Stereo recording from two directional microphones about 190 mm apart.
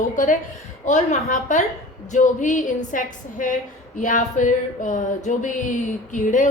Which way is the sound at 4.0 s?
40° left (ahead or behind).